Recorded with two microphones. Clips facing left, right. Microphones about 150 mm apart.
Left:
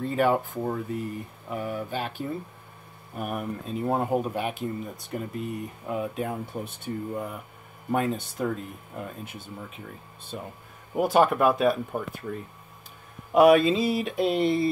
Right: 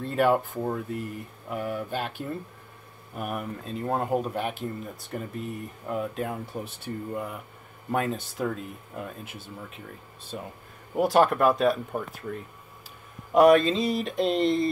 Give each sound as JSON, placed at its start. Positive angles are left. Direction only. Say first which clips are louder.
{"t": 0.0, "sound": "speech", "louder": "even", "side_deg": 0}